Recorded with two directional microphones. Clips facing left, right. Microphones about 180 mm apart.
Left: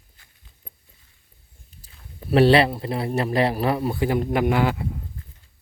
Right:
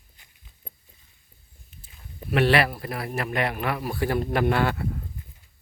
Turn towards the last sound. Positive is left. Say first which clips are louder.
# left 2 dB
turn(degrees=15)  # may be behind; listen again after turning